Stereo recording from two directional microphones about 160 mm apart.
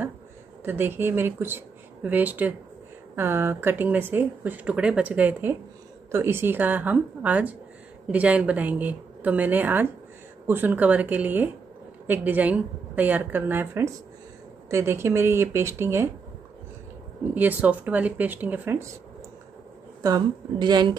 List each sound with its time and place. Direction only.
0.7 s speech: 15° right (ahead or behind)
17.3 s speech: 10° right (ahead or behind)
20.0 s a woman's voice: 25° right (ahead or behind)